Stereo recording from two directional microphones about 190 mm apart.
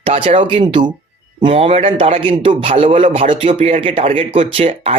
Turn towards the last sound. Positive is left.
turn(degrees=-30)  # may be behind; listen again after turning